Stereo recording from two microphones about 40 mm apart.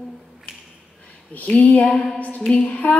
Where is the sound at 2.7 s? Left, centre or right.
Left.